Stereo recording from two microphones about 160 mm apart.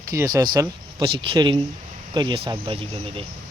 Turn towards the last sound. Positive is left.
turn(degrees=-35)  # may be behind; listen again after turning